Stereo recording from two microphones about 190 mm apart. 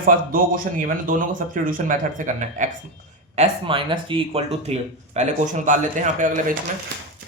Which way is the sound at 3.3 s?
30° right (ahead or behind).